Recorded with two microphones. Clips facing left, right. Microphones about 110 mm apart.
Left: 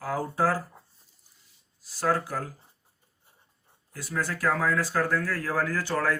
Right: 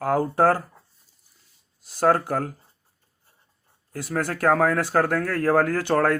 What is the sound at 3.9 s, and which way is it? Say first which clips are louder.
Speech: right 5 dB; 65° right (ahead or behind).